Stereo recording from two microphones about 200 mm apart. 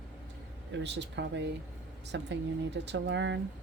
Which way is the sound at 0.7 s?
60° right (ahead or behind).